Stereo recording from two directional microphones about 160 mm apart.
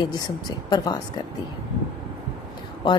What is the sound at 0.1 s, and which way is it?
Speech, 25° left (ahead or behind).